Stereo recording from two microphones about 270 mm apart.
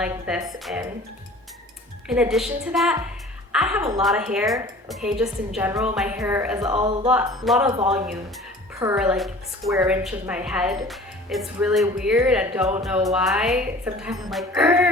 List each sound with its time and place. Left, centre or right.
0.0 s a woman's voice: centre
2.0 s a woman's voice: centre
6.7 s speech: centre
7.1 s a woman's voice: centre
8.8 s a woman's voice: centre